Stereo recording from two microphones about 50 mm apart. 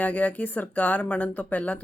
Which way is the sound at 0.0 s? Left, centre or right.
Left.